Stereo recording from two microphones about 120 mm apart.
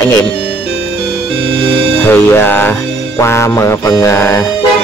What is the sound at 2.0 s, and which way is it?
Speech, 15° left (ahead or behind).